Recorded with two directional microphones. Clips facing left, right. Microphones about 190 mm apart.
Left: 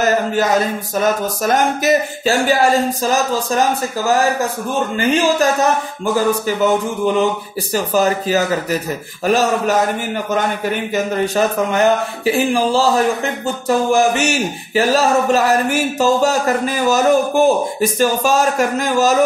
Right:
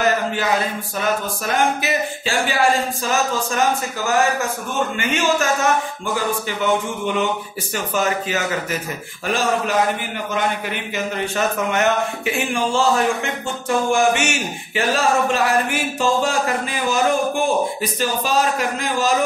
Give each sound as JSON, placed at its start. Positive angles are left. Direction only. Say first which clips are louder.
{"t": 0.0, "sound": "a sound", "louder": "left 4 dB", "side_deg": 40}
{"t": 1.0, "sound": "speech", "louder": "left 5 dB", "side_deg": 40}
{"t": 4.9, "sound": "speech", "louder": "left 7 dB", "side_deg": 35}
{"t": 11.3, "sound": "speech", "louder": "left 3 dB", "side_deg": 35}